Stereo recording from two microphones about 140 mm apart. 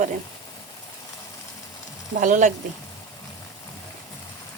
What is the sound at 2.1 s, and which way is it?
Speech, 65° right (ahead or behind).